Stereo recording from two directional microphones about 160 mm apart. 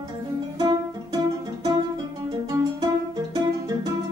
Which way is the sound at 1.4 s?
25° right (ahead or behind).